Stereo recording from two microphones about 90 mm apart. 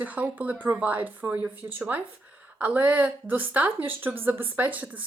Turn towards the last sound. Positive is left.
turn(degrees=-15)  # may be behind; listen again after turning